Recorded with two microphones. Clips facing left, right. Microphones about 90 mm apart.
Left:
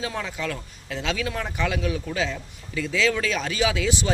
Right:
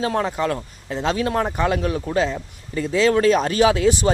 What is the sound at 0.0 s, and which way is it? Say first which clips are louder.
A man's voice: right 8 dB; 45° right (ahead or behind).